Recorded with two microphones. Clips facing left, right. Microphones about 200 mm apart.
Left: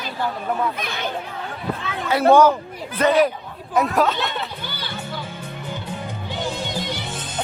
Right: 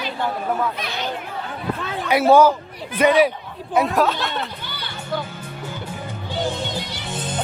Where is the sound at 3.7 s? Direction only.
Centre (ahead or behind).